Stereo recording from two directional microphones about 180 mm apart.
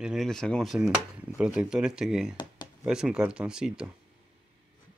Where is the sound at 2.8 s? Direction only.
5° right (ahead or behind).